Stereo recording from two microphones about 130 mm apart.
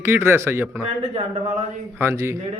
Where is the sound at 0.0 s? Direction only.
15° right (ahead or behind).